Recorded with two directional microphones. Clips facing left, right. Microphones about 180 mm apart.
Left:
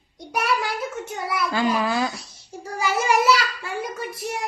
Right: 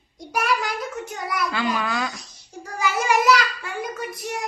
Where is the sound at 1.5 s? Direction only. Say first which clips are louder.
Left 6 dB; 35° left (ahead or behind).